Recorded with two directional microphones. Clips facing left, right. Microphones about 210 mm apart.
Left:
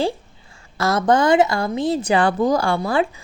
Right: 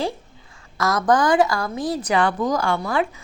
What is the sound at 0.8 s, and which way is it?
Speech, 25° left (ahead or behind).